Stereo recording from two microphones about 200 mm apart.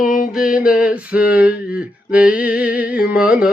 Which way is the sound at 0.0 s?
40° left (ahead or behind).